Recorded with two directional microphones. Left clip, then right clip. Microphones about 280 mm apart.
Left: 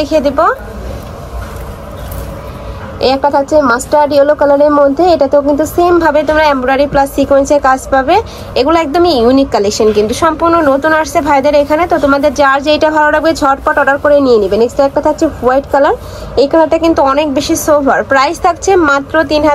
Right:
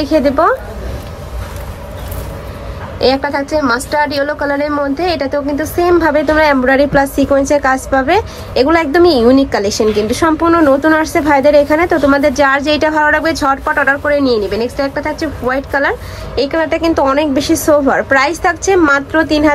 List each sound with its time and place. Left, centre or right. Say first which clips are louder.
0.0 s a woman's voice: left 1 dB; centre
3.0 s a woman's voice: left 3 dB; centre